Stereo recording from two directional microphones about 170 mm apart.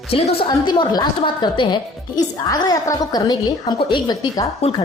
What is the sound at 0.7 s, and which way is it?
A woman's voice, 25° left (ahead or behind).